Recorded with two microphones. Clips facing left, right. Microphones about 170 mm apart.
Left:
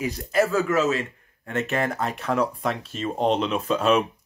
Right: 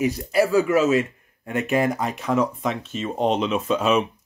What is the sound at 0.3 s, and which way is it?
Speech, 15° right (ahead or behind).